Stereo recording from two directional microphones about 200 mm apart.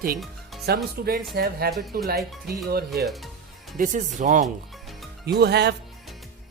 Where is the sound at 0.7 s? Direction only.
50° right (ahead or behind).